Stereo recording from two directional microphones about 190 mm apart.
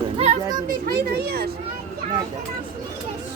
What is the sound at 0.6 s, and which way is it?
Speech, 50° right (ahead or behind).